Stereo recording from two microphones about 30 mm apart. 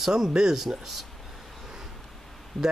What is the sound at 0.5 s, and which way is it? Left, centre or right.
Speech, centre.